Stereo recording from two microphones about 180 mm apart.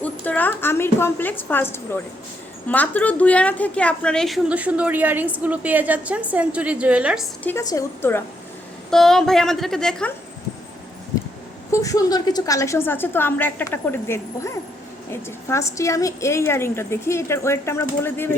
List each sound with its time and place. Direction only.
0.0 s a woman's voice: 10° left (ahead or behind)
7.4 s a woman's voice: 15° left (ahead or behind)
8.9 s a woman's voice: centre (ahead or behind)
11.7 s a woman's voice: 20° left (ahead or behind)